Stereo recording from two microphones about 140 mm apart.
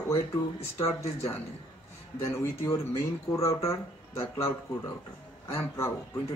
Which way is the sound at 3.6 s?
20° left (ahead or behind).